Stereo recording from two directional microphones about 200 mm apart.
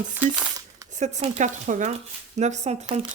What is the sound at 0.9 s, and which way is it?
Speech, 35° right (ahead or behind).